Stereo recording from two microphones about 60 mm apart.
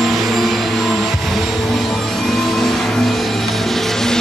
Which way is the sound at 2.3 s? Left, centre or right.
Centre.